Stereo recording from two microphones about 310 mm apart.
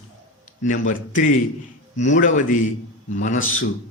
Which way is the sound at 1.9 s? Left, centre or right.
Left.